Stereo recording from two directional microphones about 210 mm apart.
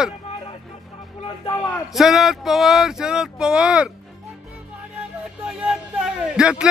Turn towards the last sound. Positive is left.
turn(degrees=-5)  # may be behind; listen again after turning